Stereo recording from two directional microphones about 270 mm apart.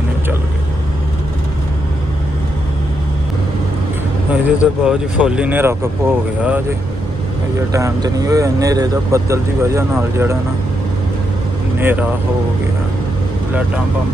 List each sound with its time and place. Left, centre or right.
4.3 s speech: centre
7.7 s speech: centre
11.8 s speech: centre